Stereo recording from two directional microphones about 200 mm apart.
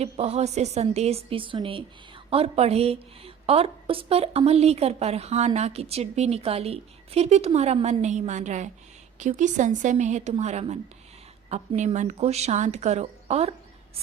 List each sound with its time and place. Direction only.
0.0 s a woman's voice: 30° right (ahead or behind)